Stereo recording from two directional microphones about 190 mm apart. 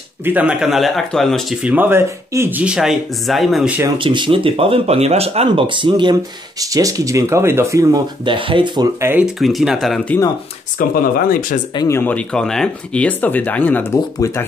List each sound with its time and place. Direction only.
0.2 s speech: 10° right (ahead or behind)
3.8 s speech: 25° right (ahead or behind)
9.4 s speech: centre (ahead or behind)
10.8 s speech: 50° left (ahead or behind)
11.7 s speech: 20° left (ahead or behind)
12.0 s speech: 5° left (ahead or behind)